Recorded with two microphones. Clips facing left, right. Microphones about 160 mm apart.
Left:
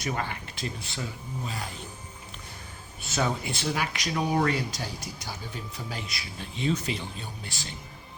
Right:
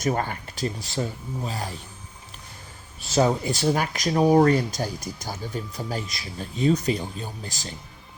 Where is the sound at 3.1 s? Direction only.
35° right (ahead or behind).